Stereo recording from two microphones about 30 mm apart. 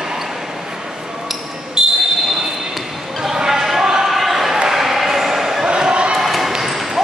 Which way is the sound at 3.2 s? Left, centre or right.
Centre.